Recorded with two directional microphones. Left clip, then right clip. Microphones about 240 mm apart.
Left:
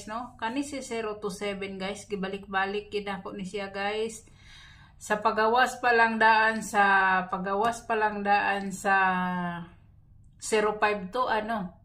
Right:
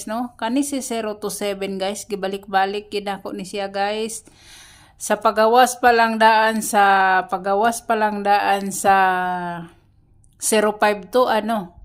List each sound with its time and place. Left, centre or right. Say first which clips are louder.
0.0 s speech: right 8 dB; right